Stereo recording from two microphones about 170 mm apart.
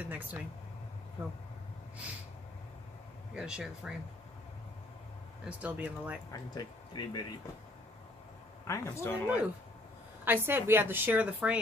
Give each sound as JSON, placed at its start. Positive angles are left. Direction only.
{"t": 0.0, "sound": "a woman's voice", "side_deg": -10}
{"t": 3.3, "sound": "speech", "side_deg": -5}
{"t": 5.4, "sound": "a woman's voice", "side_deg": -10}
{"t": 6.3, "sound": "speech", "side_deg": 25}
{"t": 8.6, "sound": "speech", "side_deg": 15}
{"t": 10.2, "sound": "a woman's voice", "side_deg": -15}